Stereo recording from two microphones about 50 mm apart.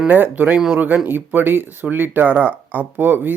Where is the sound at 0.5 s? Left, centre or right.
Centre.